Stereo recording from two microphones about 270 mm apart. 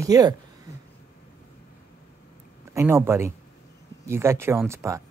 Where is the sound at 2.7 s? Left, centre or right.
Centre.